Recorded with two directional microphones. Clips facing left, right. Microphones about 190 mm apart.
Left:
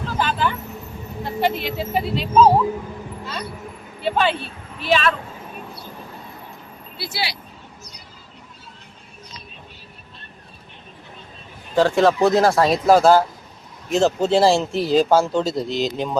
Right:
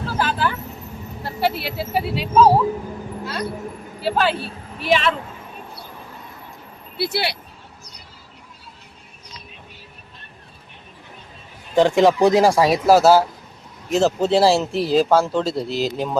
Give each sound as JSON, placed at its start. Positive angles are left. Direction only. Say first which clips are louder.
{"t": 0.1, "sound": "vehicle", "louder": "even", "side_deg": -5}
{"t": 1.2, "sound": "speech", "louder": "left 1 dB", "side_deg": -5}
{"t": 4.0, "sound": "speech", "louder": "even", "side_deg": -5}
{"t": 6.9, "sound": "speech", "louder": "right 6 dB", "side_deg": -60}
{"t": 11.7, "sound": "speech", "louder": "right 1 dB", "side_deg": -15}